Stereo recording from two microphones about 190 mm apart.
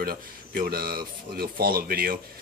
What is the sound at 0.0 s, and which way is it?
Speech, 50° right (ahead or behind).